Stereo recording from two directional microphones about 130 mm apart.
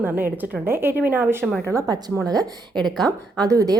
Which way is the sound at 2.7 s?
Centre (ahead or behind).